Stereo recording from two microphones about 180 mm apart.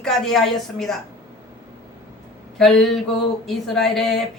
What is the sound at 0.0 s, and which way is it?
Speech, centre (ahead or behind).